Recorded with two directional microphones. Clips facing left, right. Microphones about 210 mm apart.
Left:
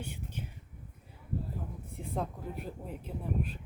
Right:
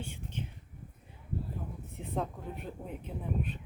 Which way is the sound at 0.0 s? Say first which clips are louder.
Right 1 dB; 10° left (ahead or behind).